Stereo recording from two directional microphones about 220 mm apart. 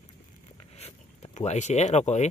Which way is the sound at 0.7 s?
30° left (ahead or behind).